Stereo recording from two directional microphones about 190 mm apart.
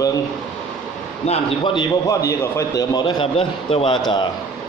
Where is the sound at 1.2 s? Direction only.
25° left (ahead or behind).